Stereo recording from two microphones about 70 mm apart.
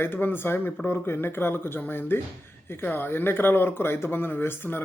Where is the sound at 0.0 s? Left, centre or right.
Left.